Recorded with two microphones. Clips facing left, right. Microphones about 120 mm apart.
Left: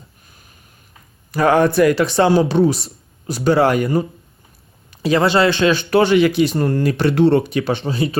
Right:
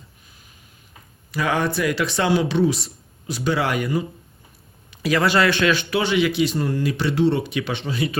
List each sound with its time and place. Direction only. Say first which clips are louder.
1.3 s speech: left 8 dB; 45° left (ahead or behind)
2.1 s speech: left 3 dB; 35° left (ahead or behind)
5.0 s speech: left 4 dB; 25° left (ahead or behind)
5.9 s speech: left 7 dB; 50° left (ahead or behind); by 8.2 s 30° left (ahead or behind)